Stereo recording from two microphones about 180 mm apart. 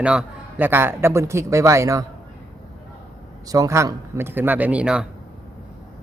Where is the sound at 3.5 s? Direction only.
20° right (ahead or behind).